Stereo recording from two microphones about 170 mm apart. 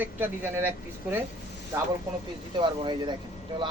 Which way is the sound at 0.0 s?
10° right (ahead or behind).